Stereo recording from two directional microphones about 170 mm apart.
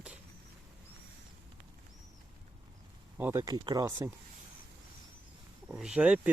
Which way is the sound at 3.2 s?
15° right (ahead or behind).